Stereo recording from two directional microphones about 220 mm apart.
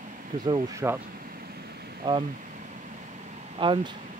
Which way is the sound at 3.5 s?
20° right (ahead or behind).